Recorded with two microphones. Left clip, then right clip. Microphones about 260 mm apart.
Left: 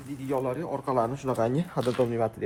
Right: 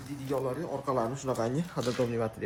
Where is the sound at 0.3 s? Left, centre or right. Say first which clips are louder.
Left 3 dB; left.